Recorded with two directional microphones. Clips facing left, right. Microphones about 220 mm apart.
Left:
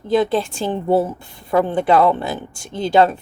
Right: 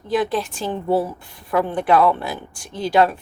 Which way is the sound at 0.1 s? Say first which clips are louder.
Left 4 dB; 25° left (ahead or behind).